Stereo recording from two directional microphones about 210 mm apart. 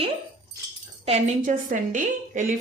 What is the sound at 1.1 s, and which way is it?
A woman's voice, 35° right (ahead or behind).